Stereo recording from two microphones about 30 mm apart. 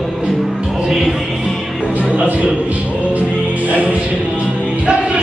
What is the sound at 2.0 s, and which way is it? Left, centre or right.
Music, right.